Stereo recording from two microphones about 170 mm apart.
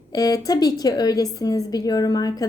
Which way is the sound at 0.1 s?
20° left (ahead or behind).